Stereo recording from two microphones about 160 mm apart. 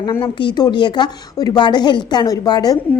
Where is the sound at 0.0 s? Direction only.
30° left (ahead or behind).